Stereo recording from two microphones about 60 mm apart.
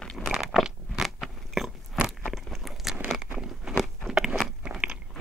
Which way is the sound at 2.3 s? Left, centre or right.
Centre.